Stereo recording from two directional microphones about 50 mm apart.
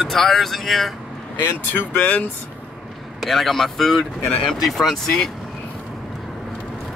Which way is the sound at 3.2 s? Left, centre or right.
Centre.